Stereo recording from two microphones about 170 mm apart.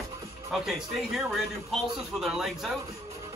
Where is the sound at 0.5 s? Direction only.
Centre (ahead or behind).